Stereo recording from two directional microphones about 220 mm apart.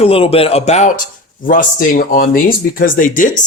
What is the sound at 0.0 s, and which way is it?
A man's voice, 25° left (ahead or behind).